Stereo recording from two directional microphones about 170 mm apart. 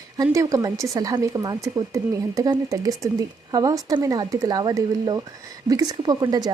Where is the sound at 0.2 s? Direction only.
20° right (ahead or behind).